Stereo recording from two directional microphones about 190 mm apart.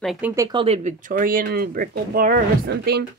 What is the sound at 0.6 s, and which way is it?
Speech, 35° right (ahead or behind).